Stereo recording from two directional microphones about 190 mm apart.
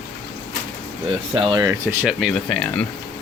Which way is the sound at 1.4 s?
25° right (ahead or behind).